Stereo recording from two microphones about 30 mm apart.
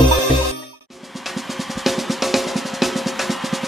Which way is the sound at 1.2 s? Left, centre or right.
Centre.